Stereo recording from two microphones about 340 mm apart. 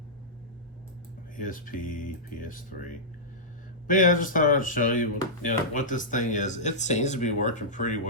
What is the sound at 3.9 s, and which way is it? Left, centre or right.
Speech, left.